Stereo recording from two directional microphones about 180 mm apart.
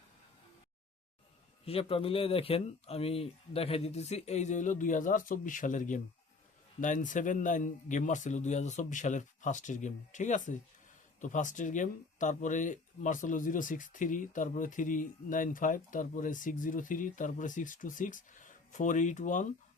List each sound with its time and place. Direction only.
1.6 s speech: 30° left (ahead or behind)